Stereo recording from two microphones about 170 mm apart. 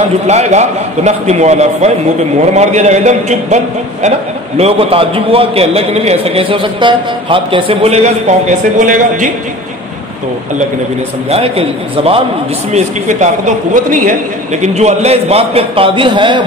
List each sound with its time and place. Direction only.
0.3 s a man's voice: 40° right (ahead or behind)
11.2 s a man's voice: 35° right (ahead or behind)